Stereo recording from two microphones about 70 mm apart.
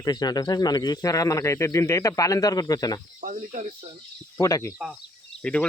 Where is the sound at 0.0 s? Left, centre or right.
Left.